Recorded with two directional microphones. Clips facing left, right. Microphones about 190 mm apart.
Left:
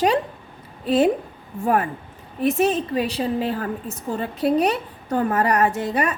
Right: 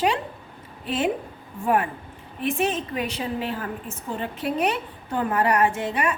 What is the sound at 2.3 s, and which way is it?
A woman's voice, 40° left (ahead or behind).